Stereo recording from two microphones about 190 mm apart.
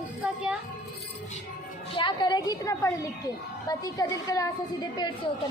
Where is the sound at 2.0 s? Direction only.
25° left (ahead or behind).